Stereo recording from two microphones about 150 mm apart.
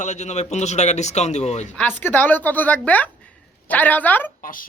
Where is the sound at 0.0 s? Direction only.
50° left (ahead or behind).